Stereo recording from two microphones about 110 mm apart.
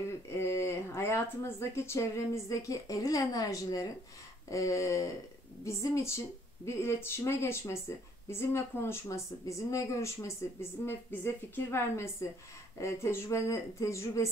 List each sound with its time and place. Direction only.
0.4 s a woman's voice: 25° left (ahead or behind)